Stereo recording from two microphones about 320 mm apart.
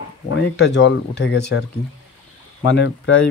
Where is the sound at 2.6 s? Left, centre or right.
Left.